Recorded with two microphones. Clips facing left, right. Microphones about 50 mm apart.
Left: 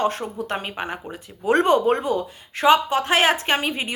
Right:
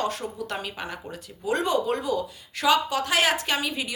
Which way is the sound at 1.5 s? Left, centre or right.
Left.